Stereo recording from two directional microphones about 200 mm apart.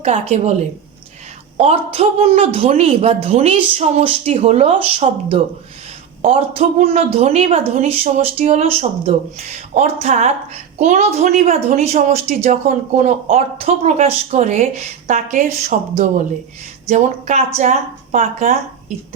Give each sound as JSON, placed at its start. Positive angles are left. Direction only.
{"t": 0.0, "sound": "a woman's voice", "side_deg": -35}
{"t": 1.5, "sound": "a woman's voice", "side_deg": -30}